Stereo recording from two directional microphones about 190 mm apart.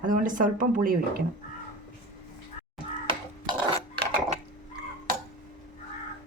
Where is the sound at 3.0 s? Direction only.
25° right (ahead or behind).